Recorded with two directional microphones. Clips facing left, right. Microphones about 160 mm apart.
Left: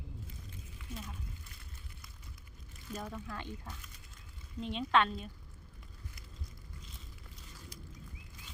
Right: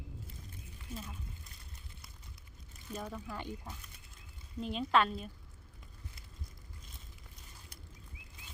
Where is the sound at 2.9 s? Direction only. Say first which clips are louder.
Even; 20° right (ahead or behind).